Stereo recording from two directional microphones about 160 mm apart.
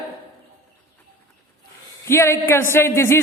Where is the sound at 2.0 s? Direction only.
15° left (ahead or behind).